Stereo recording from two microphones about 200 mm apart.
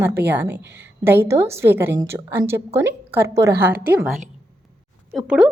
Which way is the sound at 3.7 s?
50° right (ahead or behind).